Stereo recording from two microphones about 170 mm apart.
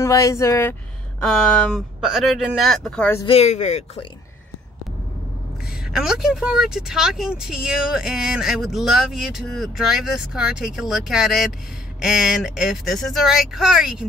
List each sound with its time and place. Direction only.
0.0 s speech: 20° left (ahead or behind)
1.2 s speech: centre (ahead or behind)
3.3 s speech: 40° left (ahead or behind)
5.9 s speech: 5° right (ahead or behind)